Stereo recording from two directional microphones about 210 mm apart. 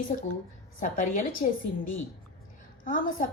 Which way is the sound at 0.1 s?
35° left (ahead or behind).